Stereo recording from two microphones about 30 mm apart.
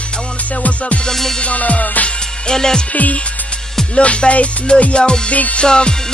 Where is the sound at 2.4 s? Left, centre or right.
Left.